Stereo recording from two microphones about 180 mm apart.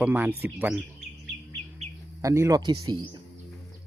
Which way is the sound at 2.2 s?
15° right (ahead or behind).